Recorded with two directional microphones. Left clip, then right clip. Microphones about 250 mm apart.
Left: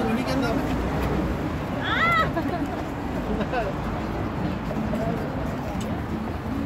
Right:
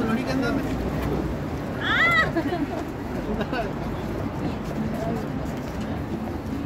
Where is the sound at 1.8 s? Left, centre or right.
Right.